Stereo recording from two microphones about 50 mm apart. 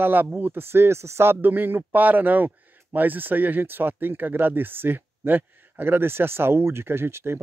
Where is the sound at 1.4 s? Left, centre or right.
Right.